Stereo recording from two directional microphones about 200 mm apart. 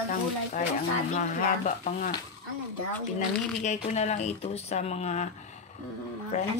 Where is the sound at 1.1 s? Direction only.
40° left (ahead or behind).